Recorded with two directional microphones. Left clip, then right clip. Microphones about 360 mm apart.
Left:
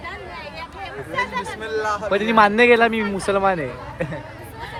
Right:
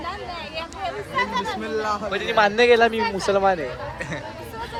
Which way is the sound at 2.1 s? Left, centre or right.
Centre.